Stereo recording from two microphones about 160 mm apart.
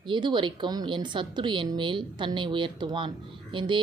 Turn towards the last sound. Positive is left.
turn(degrees=-30)  # may be behind; listen again after turning